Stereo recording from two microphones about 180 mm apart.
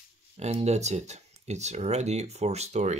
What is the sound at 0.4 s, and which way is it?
Speech, 35° right (ahead or behind).